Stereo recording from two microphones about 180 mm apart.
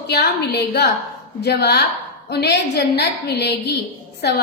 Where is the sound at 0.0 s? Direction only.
65° left (ahead or behind).